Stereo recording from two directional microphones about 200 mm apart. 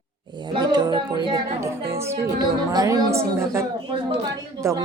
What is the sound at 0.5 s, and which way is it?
A woman's voice, 20° right (ahead or behind).